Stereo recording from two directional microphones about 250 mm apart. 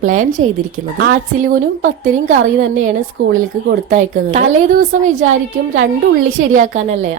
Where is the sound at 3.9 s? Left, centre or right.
Right.